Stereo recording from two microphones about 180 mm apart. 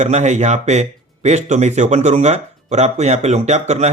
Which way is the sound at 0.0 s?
40° right (ahead or behind).